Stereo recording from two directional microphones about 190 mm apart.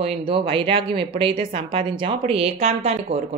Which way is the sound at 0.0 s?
30° right (ahead or behind).